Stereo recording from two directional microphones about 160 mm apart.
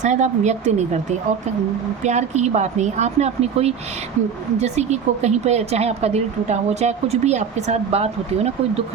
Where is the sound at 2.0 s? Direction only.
45° right (ahead or behind).